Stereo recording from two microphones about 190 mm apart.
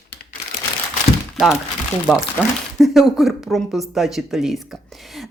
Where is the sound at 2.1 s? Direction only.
5° right (ahead or behind).